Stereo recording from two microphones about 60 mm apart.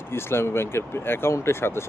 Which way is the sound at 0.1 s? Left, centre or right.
Left.